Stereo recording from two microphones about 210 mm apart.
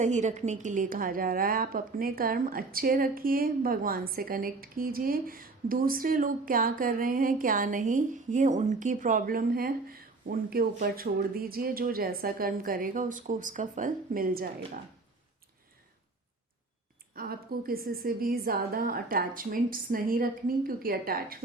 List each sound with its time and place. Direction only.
0.0 s a woman's voice: 35° right (ahead or behind)
17.2 s a woman's voice: 45° right (ahead or behind)